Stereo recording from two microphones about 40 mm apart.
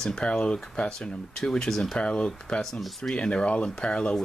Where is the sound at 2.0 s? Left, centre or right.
Left.